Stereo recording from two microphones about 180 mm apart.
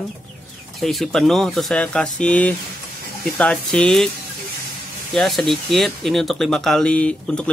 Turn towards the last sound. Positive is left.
turn(degrees=5)  # may be behind; listen again after turning